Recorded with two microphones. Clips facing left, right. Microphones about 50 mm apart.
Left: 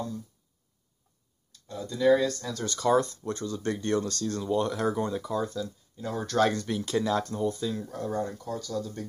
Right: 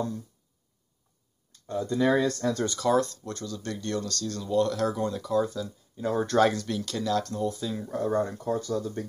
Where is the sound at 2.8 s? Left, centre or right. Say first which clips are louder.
Left 2 dB; centre.